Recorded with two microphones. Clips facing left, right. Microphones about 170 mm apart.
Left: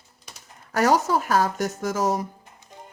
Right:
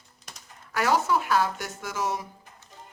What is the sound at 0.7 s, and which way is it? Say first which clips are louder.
Speech: left 4 dB; 40° left (ahead or behind).